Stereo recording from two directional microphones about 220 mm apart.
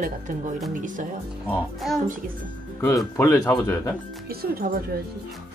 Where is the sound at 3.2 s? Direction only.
15° left (ahead or behind).